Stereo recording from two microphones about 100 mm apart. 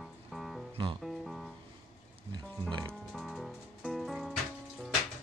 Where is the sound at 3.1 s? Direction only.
Centre (ahead or behind).